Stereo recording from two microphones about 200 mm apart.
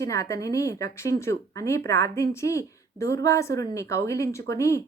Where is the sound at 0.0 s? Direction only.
15° left (ahead or behind).